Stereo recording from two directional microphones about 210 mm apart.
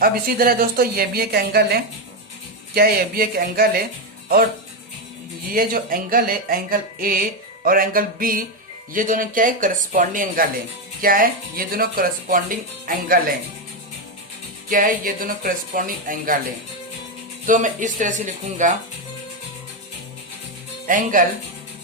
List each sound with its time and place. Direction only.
0.0 s speech: 45° right (ahead or behind)
5.5 s speech: 45° right (ahead or behind)
14.7 s speech: 40° right (ahead or behind)
17.4 s speech: 40° right (ahead or behind)
20.8 s speech: 40° right (ahead or behind)